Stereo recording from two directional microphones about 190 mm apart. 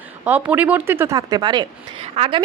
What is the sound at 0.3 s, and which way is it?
A woman's voice, 10° right (ahead or behind).